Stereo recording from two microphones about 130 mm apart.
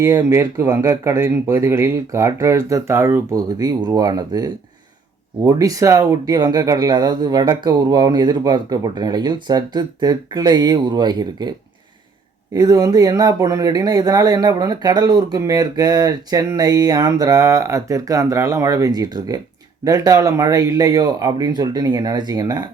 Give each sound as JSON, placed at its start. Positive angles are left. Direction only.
{"t": 0.0, "sound": "speech", "side_deg": -25}
{"t": 12.5, "sound": "speech", "side_deg": -30}